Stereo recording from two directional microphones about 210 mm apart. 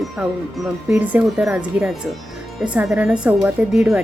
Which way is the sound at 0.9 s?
5° right (ahead or behind).